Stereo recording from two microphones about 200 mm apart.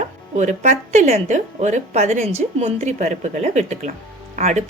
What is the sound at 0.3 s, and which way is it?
A woman's voice, 35° right (ahead or behind).